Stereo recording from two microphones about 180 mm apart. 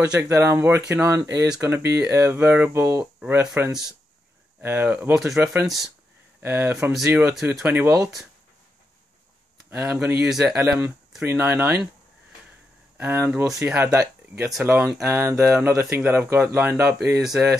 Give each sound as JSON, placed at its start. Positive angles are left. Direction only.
{"t": 0.0, "sound": "speech", "side_deg": -5}
{"t": 9.7, "sound": "speech", "side_deg": -10}
{"t": 12.9, "sound": "speech", "side_deg": -10}